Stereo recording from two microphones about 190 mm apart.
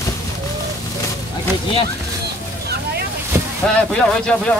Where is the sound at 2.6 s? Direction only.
60° right (ahead or behind).